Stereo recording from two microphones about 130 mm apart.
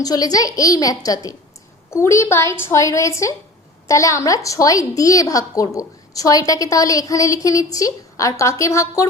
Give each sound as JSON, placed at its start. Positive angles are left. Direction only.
{"t": 0.0, "sound": "a woman's voice", "side_deg": 30}